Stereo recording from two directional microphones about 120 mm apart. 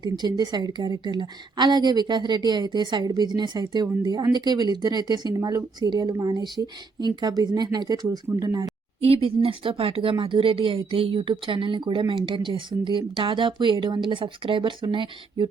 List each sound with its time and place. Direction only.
0.0 s a woman's voice: 35° right (ahead or behind)
9.0 s speech: 55° right (ahead or behind)